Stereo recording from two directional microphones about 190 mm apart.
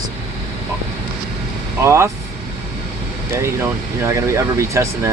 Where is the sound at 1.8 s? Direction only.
15° right (ahead or behind).